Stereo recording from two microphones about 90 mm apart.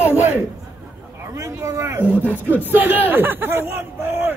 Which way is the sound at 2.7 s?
20° right (ahead or behind).